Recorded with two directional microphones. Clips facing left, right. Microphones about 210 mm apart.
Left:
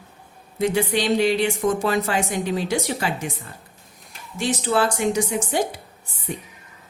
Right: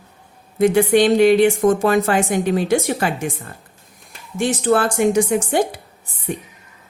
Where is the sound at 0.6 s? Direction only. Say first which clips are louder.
Right 8 dB; 50° right (ahead or behind).